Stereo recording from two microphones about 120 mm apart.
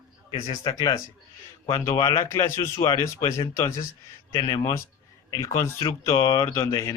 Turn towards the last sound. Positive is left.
turn(degrees=25)  # may be behind; listen again after turning